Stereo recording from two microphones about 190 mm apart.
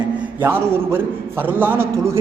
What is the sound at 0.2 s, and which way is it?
A man's voice, 10° right (ahead or behind).